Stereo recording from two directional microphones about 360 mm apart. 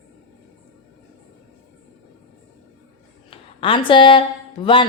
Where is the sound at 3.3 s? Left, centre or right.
Centre.